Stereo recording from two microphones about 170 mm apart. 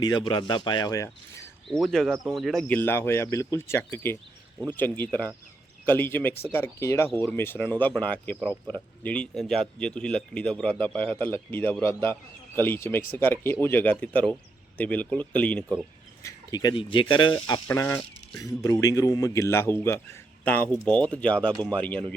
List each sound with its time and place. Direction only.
0.0 s a man's voice: 25° left (ahead or behind)
1.7 s a man's voice: centre (ahead or behind)
16.2 s a man's voice: 25° left (ahead or behind)
17.7 s a man's voice: 15° left (ahead or behind)